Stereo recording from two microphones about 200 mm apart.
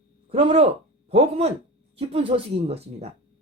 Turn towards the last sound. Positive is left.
turn(degrees=-30)  # may be behind; listen again after turning